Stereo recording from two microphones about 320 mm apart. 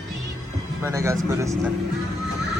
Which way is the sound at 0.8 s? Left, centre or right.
Centre.